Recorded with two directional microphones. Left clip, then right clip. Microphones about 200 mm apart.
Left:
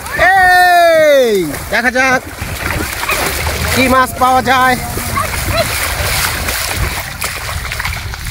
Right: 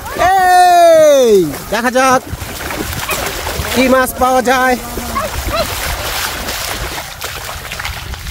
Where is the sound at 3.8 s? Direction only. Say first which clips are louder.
Even; 30° right (ahead or behind).